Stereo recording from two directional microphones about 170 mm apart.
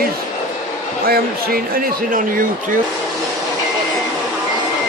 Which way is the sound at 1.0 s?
65° right (ahead or behind).